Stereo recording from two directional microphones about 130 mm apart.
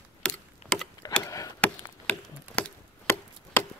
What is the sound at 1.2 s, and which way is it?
Chop, 25° left (ahead or behind).